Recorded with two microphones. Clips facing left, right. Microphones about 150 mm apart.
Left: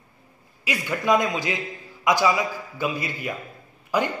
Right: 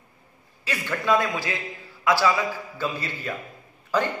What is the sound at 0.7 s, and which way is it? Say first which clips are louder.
A man's voice: left 2 dB; 15° left (ahead or behind).